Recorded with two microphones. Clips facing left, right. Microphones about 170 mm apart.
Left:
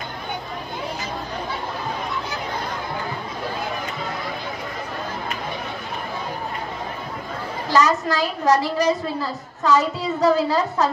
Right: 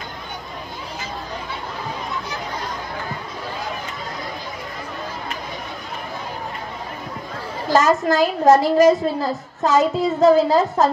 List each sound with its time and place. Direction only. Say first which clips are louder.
7.7 s a woman's voice: right 3 dB; 50° right (ahead or behind)